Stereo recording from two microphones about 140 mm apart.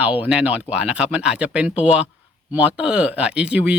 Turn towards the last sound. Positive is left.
turn(degrees=-10)  # may be behind; listen again after turning